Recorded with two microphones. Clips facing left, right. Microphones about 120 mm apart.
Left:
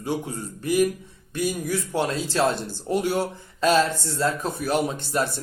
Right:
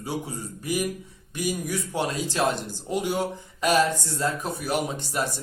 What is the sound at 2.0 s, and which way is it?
Speech, 15° right (ahead or behind).